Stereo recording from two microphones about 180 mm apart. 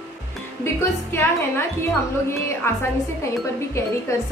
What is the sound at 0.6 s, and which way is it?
Speech, 15° left (ahead or behind).